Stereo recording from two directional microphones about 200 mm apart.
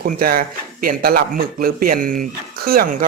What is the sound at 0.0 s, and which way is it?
A man's voice, 45° right (ahead or behind).